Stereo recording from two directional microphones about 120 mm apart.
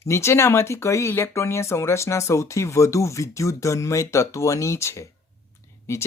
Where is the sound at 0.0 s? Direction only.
20° left (ahead or behind).